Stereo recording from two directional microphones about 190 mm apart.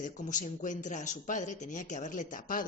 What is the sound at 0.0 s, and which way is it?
A woman's voice, 40° left (ahead or behind).